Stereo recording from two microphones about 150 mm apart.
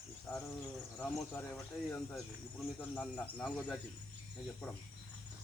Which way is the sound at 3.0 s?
10° left (ahead or behind).